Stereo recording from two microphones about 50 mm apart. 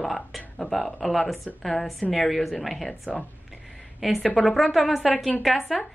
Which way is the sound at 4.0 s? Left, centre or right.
Centre.